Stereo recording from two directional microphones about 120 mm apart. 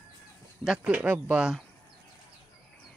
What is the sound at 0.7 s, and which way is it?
Speech, 10° right (ahead or behind).